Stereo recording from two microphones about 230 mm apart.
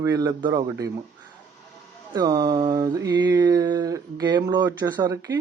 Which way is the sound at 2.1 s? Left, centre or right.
Centre.